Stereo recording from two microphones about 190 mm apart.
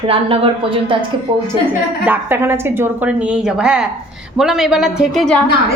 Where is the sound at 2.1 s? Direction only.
10° right (ahead or behind).